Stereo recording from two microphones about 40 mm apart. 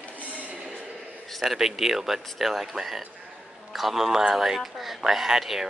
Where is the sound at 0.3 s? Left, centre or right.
Right.